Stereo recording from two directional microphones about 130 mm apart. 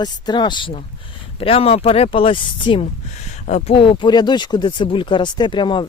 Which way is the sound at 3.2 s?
60° left (ahead or behind).